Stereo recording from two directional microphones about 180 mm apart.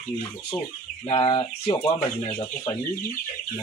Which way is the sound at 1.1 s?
25° left (ahead or behind).